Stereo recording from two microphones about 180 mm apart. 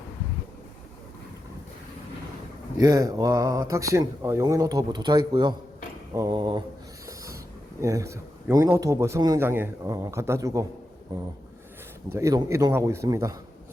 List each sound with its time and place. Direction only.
2.8 s speech: 20° right (ahead or behind)
12.0 s a man's voice: 15° right (ahead or behind)